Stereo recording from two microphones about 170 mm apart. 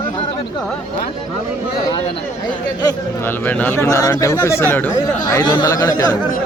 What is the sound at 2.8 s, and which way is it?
Speech, 20° left (ahead or behind).